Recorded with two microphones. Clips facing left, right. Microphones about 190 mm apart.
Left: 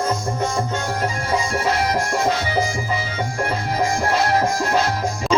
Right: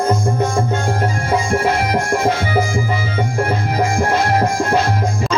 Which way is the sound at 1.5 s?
50° right (ahead or behind).